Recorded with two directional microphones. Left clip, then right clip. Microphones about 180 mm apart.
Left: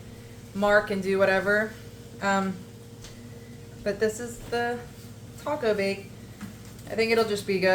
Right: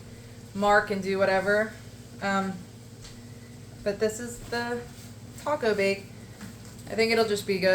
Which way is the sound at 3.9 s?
10° left (ahead or behind).